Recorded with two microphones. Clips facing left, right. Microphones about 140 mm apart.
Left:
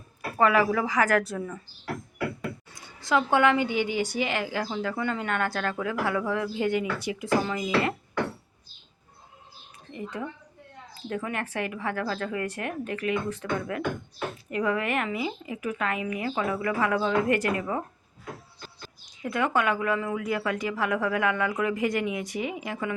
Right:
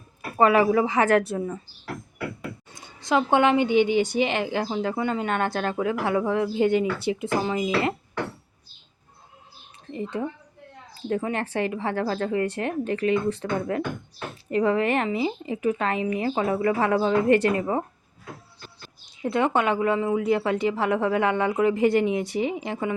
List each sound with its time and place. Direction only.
0.3 s a woman's voice: 20° right (ahead or behind)
2.7 s a woman's voice: 20° right (ahead or behind)
9.9 s a woman's voice: 30° right (ahead or behind)
19.2 s a woman's voice: 25° right (ahead or behind)